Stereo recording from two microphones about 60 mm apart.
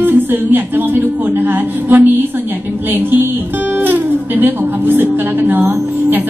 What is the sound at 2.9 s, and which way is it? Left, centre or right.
A woman's voice, right.